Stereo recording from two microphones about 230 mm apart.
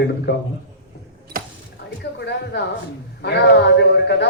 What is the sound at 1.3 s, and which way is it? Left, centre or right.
Cash register, right.